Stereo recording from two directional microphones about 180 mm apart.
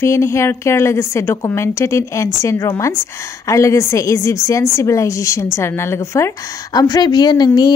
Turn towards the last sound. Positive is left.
turn(degrees=25)  # may be behind; listen again after turning